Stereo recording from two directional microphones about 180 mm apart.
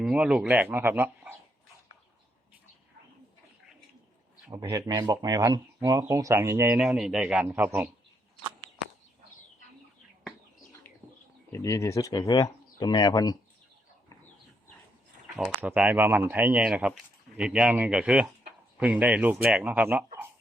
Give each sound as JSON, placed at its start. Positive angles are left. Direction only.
{"t": 0.0, "sound": "speech", "side_deg": -5}
{"t": 4.5, "sound": "speech", "side_deg": -20}
{"t": 11.5, "sound": "speech", "side_deg": 15}
{"t": 15.4, "sound": "speech", "side_deg": -5}